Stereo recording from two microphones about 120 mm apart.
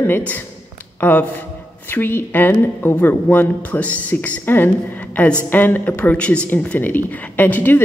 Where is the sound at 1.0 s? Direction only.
15° left (ahead or behind).